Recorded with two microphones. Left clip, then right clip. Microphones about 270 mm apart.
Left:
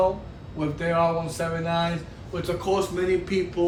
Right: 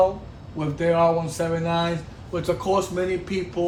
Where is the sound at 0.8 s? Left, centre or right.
Right.